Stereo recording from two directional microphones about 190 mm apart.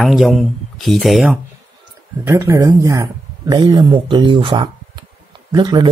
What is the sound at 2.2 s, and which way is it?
Speech, 15° right (ahead or behind).